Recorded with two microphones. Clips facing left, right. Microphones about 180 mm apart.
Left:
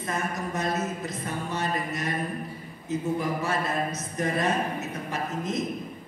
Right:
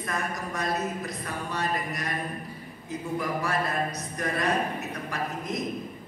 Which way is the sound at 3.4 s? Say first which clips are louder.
Left 1 dB; 25° left (ahead or behind).